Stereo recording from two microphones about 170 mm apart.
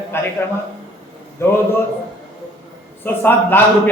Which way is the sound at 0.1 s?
15° left (ahead or behind).